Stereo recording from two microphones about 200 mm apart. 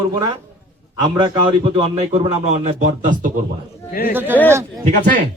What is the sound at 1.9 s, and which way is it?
Speech, 35° right (ahead or behind).